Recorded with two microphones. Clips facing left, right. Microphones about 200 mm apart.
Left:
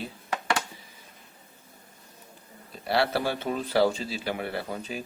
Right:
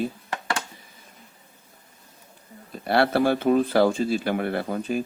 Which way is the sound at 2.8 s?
55° right (ahead or behind).